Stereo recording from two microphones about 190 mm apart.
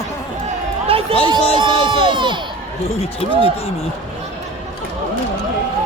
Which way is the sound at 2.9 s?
30° left (ahead or behind).